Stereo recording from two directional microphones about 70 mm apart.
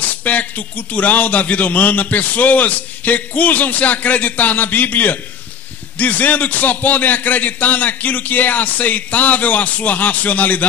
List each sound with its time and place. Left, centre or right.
0.0 s a man's voice: left